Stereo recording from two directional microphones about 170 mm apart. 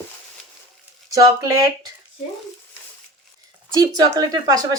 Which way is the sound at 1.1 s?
20° right (ahead or behind).